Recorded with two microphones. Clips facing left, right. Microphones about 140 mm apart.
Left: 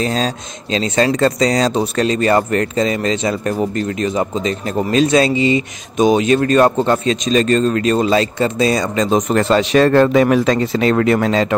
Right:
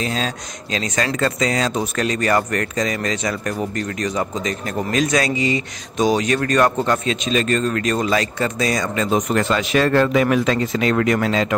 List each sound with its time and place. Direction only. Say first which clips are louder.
0.0 s speech: left 5 dB; 40° left (ahead or behind)
0.7 s speech: left 7 dB; 25° left (ahead or behind)